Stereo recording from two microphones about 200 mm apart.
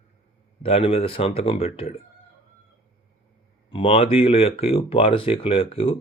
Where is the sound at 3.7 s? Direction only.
25° left (ahead or behind).